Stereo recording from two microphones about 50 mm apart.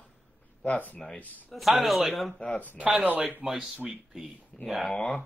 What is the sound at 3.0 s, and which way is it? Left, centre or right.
Speech, right.